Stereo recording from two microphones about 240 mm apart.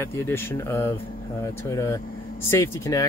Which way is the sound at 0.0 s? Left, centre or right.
Centre.